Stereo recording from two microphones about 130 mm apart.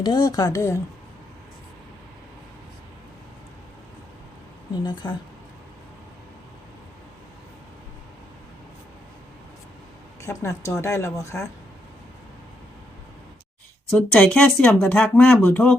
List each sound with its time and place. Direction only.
0.0 s a woman's voice: 30° left (ahead or behind)
4.7 s a woman's voice: 35° left (ahead or behind)
10.2 s a woman's voice: 20° left (ahead or behind)
13.9 s speech: 5° left (ahead or behind)